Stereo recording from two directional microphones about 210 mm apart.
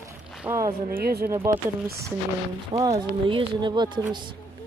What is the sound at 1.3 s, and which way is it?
Speech, 15° right (ahead or behind).